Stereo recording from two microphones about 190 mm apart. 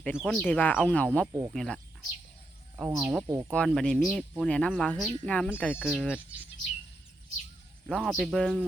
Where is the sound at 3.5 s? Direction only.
5° left (ahead or behind).